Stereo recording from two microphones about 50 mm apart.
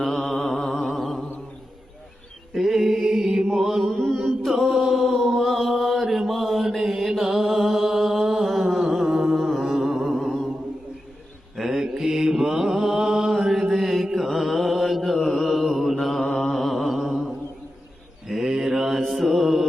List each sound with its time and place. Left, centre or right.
0.0 s a sound: centre
0.9 s humming: centre
2.5 s music: centre
11.5 s mantra: centre
16.2 s mantra: centre
16.5 s a sound: centre
17.1 s mantra: centre